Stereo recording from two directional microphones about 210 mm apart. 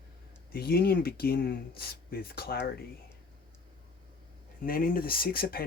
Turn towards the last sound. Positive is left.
turn(degrees=45)  # may be behind; listen again after turning